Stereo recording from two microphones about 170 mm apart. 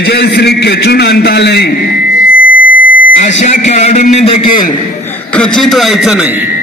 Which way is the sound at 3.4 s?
45° left (ahead or behind).